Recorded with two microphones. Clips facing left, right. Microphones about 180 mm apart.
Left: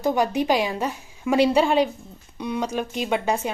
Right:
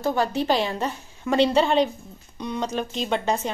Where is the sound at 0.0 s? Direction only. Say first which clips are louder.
Left 2 dB; 15° left (ahead or behind).